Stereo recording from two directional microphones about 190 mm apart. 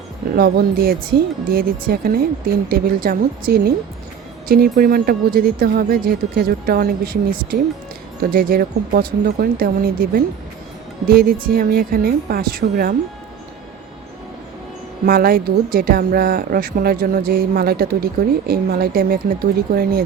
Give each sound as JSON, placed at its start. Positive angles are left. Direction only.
{"t": 0.3, "sound": "a woman's voice", "side_deg": -55}
{"t": 15.0, "sound": "a woman's voice", "side_deg": -50}